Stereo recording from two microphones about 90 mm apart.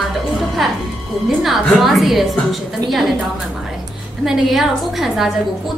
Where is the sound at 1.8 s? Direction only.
Centre (ahead or behind).